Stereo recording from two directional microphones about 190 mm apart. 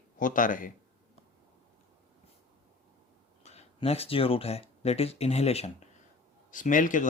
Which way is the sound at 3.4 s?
35° left (ahead or behind).